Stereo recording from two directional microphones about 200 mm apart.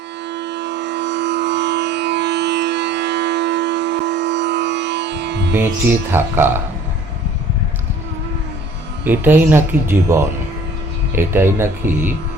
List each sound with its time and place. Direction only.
0.3 s music: 60° right (ahead or behind)
6.1 s speech: 10° right (ahead or behind)
9.0 s speech: 10° right (ahead or behind)